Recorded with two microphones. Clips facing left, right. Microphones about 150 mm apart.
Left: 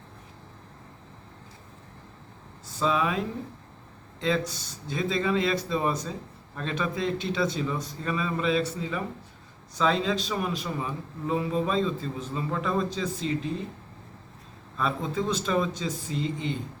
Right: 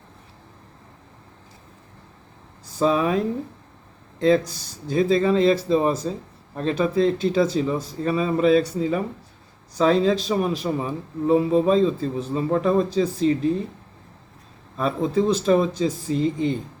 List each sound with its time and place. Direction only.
2.7 s a man's voice: 40° right (ahead or behind)
4.2 s a man's voice: 40° right (ahead or behind)
14.8 s a man's voice: 40° right (ahead or behind)